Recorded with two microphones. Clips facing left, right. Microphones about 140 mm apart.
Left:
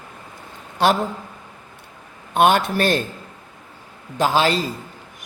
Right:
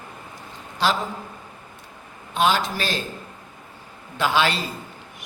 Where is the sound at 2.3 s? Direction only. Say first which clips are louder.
Left 5 dB; 55° left (ahead or behind).